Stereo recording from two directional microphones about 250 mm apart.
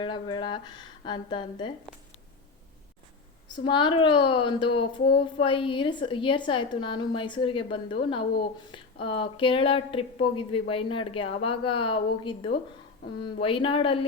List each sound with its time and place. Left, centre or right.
0.0 s speech: centre
3.5 s speech: centre